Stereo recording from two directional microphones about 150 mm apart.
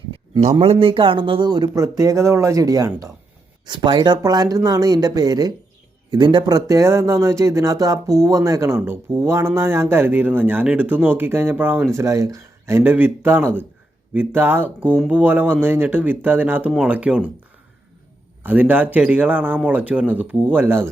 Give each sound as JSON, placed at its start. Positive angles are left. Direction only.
{"t": 0.1, "sound": "a sound", "side_deg": -45}
{"t": 0.6, "sound": "speech", "side_deg": -40}
{"t": 18.4, "sound": "speech", "side_deg": -10}